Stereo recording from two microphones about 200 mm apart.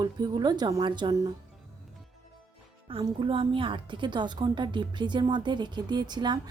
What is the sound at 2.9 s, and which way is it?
A woman's voice, 25° right (ahead or behind).